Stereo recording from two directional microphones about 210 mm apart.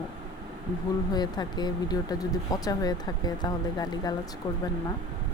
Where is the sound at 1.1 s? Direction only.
20° left (ahead or behind).